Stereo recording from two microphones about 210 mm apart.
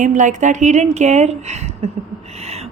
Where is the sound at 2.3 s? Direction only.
30° right (ahead or behind).